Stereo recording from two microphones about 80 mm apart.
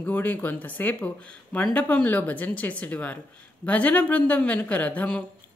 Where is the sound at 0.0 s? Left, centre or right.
Left.